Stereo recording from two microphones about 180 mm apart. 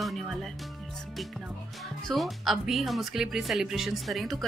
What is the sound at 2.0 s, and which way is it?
Speech, centre (ahead or behind).